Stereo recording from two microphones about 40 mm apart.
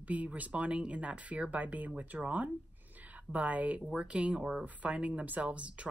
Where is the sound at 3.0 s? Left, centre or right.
Right.